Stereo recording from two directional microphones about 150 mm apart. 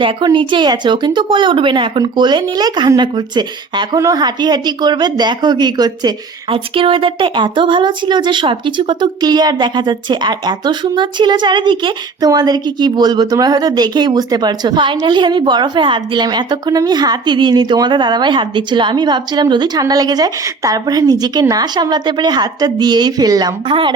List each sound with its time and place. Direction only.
0.0 s a woman's voice: 35° right (ahead or behind)